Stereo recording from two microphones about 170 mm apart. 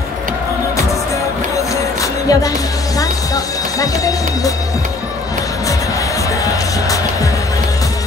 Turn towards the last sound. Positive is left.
turn(degrees=20)  # may be behind; listen again after turning